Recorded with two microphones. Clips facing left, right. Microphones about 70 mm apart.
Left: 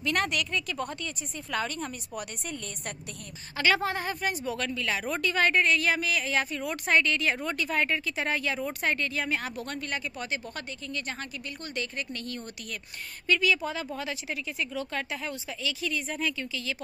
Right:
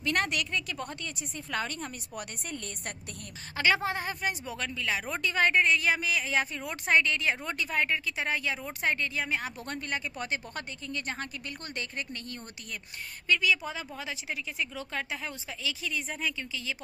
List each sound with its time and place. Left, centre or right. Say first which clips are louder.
0.0 s speech: left 1 dB; right
3.5 s speech: left 1 dB; centre
9.7 s speech: left 1 dB; right
13.3 s speech: left 2 dB; centre